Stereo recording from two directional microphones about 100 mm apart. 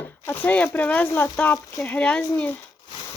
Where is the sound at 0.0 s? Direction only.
20° left (ahead or behind).